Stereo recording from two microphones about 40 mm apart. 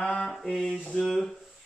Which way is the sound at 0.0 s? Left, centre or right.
Left.